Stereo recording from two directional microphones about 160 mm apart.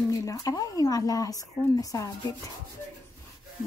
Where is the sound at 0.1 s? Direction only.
20° left (ahead or behind).